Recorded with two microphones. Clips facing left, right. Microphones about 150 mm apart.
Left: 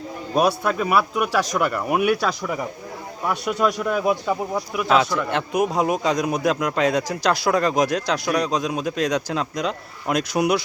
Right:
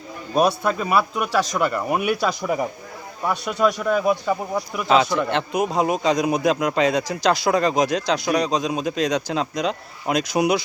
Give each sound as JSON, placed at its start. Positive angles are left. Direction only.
{"t": 0.3, "sound": "speech", "side_deg": 5}
{"t": 2.4, "sound": "speech", "side_deg": -25}
{"t": 3.2, "sound": "speech", "side_deg": 5}
{"t": 6.6, "sound": "speech", "side_deg": -5}
{"t": 6.8, "sound": "speech", "side_deg": 5}